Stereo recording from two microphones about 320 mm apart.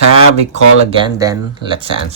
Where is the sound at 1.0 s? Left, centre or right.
Centre.